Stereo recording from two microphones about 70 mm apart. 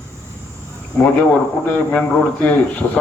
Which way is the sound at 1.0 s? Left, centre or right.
Left.